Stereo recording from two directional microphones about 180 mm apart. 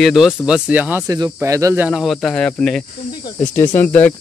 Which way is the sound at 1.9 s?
Centre (ahead or behind).